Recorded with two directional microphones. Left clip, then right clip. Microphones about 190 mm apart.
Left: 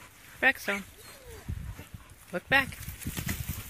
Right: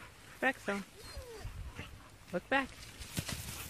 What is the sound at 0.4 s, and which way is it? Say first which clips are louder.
Speech: left 8 dB; 15° left (ahead or behind).